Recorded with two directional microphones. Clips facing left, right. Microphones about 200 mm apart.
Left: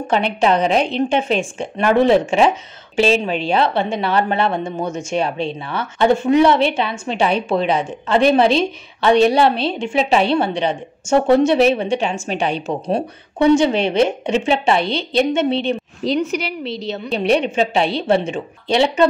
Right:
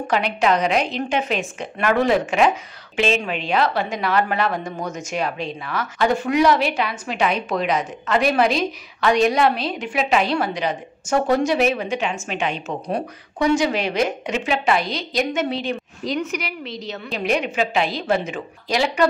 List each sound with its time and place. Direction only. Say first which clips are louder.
0.0 s a woman's voice: left 3 dB; 30° left (ahead or behind)